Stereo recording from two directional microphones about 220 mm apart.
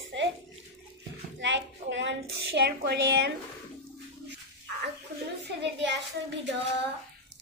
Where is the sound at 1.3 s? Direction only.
55° right (ahead or behind).